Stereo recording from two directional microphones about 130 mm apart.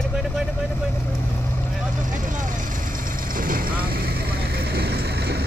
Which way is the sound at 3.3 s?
90° right.